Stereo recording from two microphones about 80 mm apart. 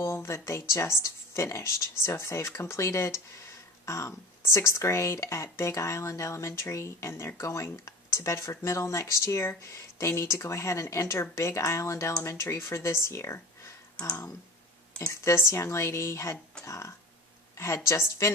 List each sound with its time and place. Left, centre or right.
0.0 s speech: left
14.0 s speech: centre
15.1 s speech: left